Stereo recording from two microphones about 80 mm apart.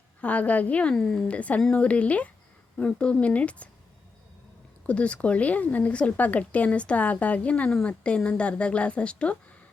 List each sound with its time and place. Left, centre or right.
0.2 s speech: centre
4.9 s speech: centre